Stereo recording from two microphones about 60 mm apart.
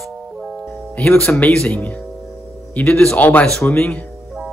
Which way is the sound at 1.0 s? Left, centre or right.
Left.